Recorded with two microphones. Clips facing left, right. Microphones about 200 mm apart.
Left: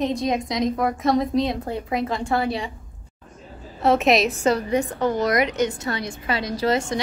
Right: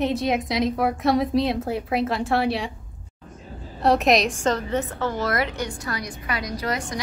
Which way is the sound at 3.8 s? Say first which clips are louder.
Left 1 dB; centre (ahead or behind).